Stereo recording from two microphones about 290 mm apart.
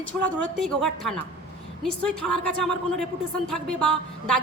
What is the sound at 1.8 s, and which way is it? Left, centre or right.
Speech, centre.